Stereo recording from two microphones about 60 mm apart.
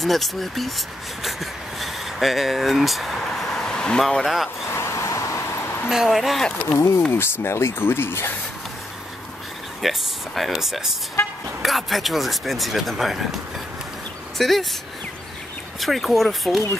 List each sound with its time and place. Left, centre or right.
0.0 s speech: centre
4.0 s speech: centre
4.7 s vehicle: left
5.9 s speech: centre
7.1 s speech: left
9.8 s speech: centre
14.4 s speech: centre
15.8 s speech: centre